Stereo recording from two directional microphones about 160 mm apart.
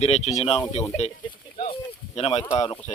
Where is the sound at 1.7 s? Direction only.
40° left (ahead or behind).